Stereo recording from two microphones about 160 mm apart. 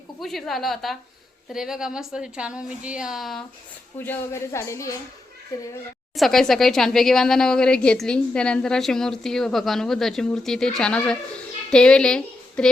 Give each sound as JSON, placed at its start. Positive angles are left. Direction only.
{"t": 0.2, "sound": "speech", "side_deg": 0}
{"t": 3.9, "sound": "speech", "side_deg": 15}
{"t": 6.1, "sound": "a woman's voice", "side_deg": 0}